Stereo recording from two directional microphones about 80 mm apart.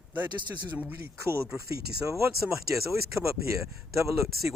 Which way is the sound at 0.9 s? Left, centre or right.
Right.